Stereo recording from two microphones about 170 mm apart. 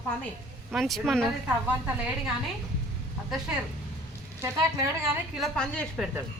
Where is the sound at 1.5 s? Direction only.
10° right (ahead or behind).